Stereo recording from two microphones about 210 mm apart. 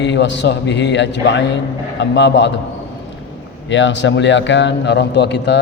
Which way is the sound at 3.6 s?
60° left (ahead or behind).